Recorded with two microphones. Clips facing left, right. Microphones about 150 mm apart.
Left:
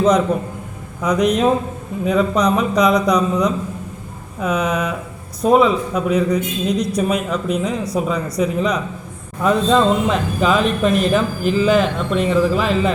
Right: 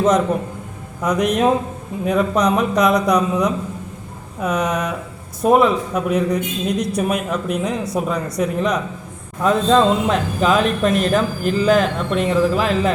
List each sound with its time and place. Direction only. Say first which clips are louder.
1.0 s speech: left 1 dB; 5° right (ahead or behind)